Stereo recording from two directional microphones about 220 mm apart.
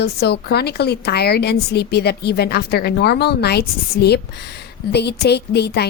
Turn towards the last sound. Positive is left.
turn(degrees=50)  # may be behind; listen again after turning